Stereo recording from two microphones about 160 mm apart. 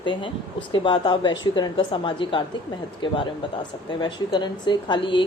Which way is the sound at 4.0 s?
30° left (ahead or behind).